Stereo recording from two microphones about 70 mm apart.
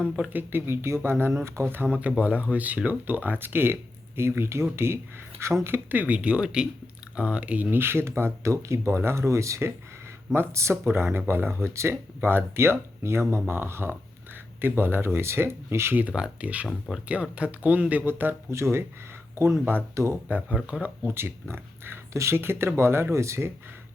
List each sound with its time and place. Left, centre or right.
0.3 s speech: right
6.1 s speech: centre; by 16.0 s right
16.0 s speech: right
20.2 s speech: right